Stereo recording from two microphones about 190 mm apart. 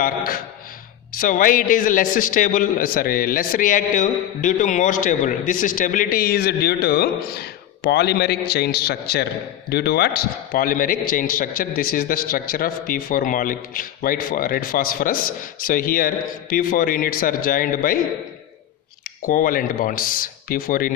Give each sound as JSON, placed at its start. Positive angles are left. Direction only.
{"t": 0.0, "sound": "a man's voice", "side_deg": 50}
{"t": 19.2, "sound": "a man's voice", "side_deg": 45}